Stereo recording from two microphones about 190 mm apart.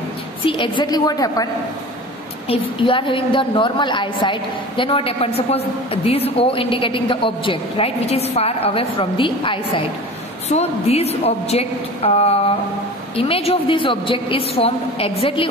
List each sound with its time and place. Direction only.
0.5 s a woman's voice: 25° left (ahead or behind)